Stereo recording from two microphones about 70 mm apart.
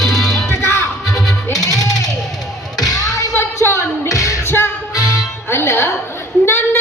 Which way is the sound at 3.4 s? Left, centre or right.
Left.